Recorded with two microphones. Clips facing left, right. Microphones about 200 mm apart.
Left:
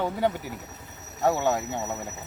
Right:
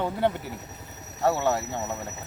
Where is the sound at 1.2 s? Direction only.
15° left (ahead or behind).